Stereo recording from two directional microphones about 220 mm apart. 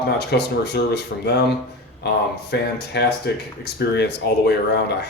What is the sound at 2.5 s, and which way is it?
Speech, 50° left (ahead or behind).